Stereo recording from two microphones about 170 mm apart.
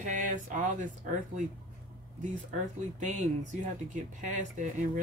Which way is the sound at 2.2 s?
45° right (ahead or behind).